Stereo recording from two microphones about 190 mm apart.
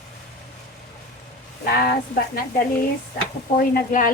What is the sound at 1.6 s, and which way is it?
A woman's voice, 50° left (ahead or behind).